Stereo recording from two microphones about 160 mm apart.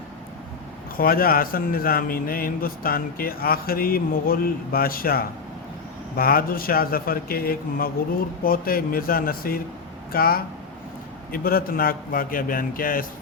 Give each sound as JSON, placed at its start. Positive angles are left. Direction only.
{"t": 0.9, "sound": "a man's voice", "side_deg": 65}